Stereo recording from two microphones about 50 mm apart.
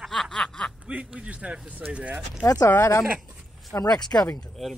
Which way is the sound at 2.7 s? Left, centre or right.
Left.